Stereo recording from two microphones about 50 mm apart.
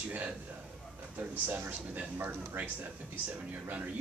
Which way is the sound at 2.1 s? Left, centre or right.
Right.